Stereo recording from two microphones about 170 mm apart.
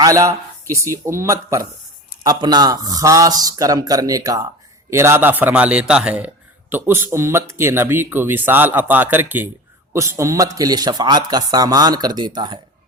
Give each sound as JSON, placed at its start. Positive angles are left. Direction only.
{"t": 0.0, "sound": "a man's voice", "side_deg": -20}